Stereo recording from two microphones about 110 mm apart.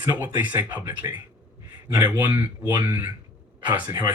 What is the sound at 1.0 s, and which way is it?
Speech, 30° right (ahead or behind).